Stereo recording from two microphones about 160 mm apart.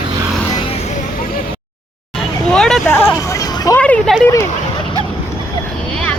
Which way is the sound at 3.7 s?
10° left (ahead or behind).